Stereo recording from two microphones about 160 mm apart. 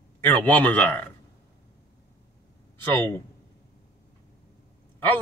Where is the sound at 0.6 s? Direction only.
10° left (ahead or behind).